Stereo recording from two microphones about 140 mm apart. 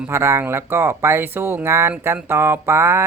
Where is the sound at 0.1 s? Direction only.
20° right (ahead or behind).